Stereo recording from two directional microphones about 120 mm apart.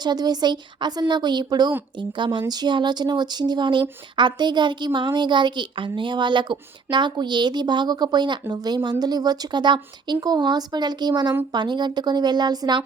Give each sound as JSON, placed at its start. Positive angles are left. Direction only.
{"t": 0.0, "sound": "speech", "side_deg": -35}